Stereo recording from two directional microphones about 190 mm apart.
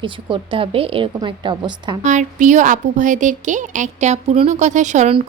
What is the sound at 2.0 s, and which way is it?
Speech, 40° right (ahead or behind).